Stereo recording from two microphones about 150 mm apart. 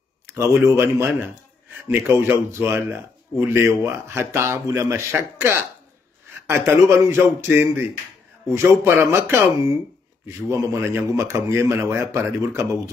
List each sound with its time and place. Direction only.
0.7 s a man's voice: 15° right (ahead or behind)